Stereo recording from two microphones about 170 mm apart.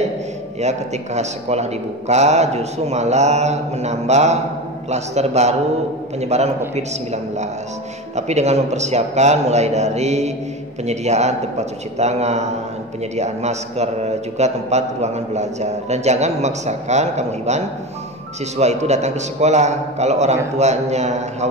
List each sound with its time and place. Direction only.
0.6 s a man's voice: 40° right (ahead or behind)